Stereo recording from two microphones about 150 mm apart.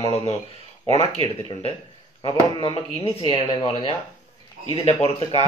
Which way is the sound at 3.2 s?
35° left (ahead or behind).